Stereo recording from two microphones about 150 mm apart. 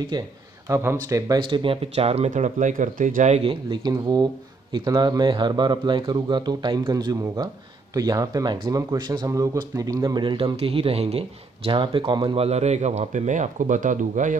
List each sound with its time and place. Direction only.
0.1 s speech: 30° right (ahead or behind)
0.7 s speech: 20° right (ahead or behind)
1.5 s speech: 35° right (ahead or behind); by 3.4 s 55° right (ahead or behind)
3.4 s speech: 30° right (ahead or behind); by 14.4 s 60° right (ahead or behind)